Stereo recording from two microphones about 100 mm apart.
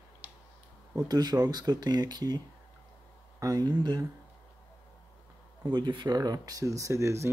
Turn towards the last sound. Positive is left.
turn(degrees=-30)  # may be behind; listen again after turning